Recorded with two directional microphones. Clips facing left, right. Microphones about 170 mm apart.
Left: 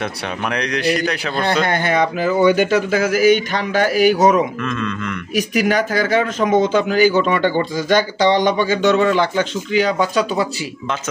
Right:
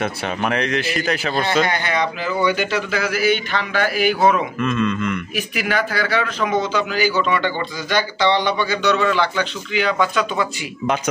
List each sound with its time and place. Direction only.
0.0 s speech: centre (ahead or behind)
1.7 s a man's voice: 50° left (ahead or behind)
4.6 s speech: 5° right (ahead or behind)
5.3 s a man's voice: 40° left (ahead or behind)